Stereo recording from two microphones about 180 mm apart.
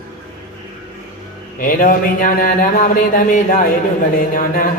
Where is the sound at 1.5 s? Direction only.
50° left (ahead or behind).